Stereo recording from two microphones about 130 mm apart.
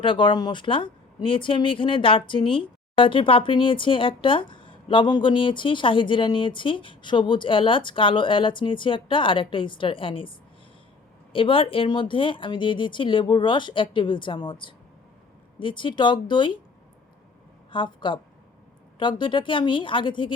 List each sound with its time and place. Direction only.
0.0 s speech: 40° left (ahead or behind)
17.7 s a woman's voice: 40° left (ahead or behind)